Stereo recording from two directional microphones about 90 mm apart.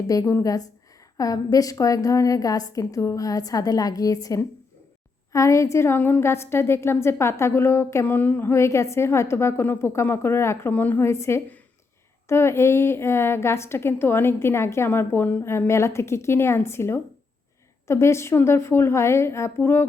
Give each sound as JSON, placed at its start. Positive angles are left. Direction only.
{"t": 0.1, "sound": "a woman's voice", "side_deg": 40}